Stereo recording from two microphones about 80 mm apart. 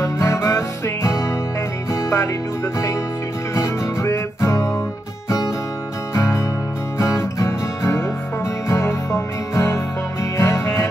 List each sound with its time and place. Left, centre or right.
0.0 s music: left
3.5 s music: left
6.1 s music: left